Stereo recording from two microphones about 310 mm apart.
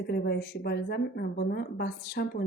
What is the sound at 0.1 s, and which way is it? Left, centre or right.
A woman's voice, left.